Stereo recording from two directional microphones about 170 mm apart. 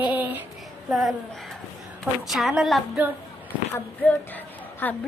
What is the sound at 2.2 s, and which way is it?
Speech, centre (ahead or behind).